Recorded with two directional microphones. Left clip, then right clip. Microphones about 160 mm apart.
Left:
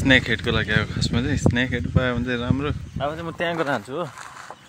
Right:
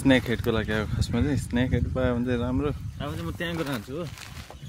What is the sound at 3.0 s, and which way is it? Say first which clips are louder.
Speech: left 8 dB; 90° right.